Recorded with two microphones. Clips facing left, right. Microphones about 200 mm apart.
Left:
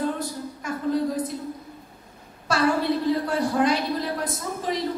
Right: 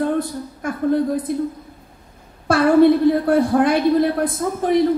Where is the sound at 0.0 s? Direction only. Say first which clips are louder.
Right 6 dB; 55° right (ahead or behind).